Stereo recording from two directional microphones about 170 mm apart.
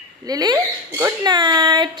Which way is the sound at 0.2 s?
25° right (ahead or behind).